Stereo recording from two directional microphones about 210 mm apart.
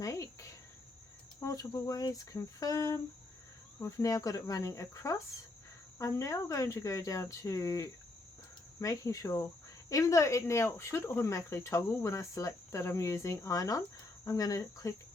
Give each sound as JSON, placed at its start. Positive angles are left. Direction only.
{"t": 0.0, "sound": "cricket", "side_deg": 15}
{"t": 1.4, "sound": "speech", "side_deg": 15}